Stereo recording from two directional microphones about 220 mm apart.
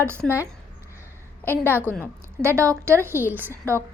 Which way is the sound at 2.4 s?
10° right (ahead or behind).